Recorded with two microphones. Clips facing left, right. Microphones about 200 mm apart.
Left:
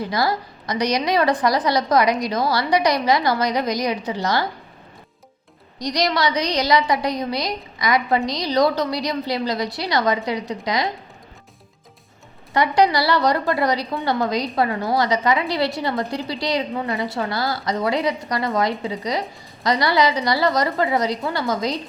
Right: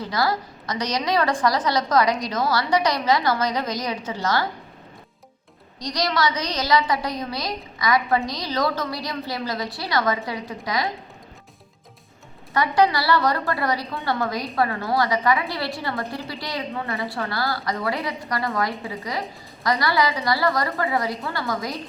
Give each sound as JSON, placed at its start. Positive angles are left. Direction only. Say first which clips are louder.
{"t": 0.0, "sound": "a woman's voice", "louder": "left 2 dB", "side_deg": 15}
{"t": 5.9, "sound": "a woman's voice", "louder": "left 3 dB", "side_deg": 15}
{"t": 12.5, "sound": "a woman's voice", "louder": "left 2 dB", "side_deg": 15}